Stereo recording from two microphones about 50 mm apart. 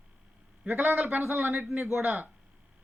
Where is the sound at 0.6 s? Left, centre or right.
Right.